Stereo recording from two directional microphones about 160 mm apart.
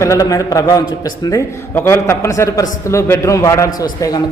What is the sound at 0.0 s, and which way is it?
A man's voice, 20° left (ahead or behind).